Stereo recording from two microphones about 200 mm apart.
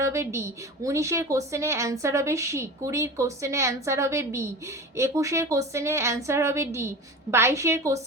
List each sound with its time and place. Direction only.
0.0 s a woman's voice: 15° right (ahead or behind)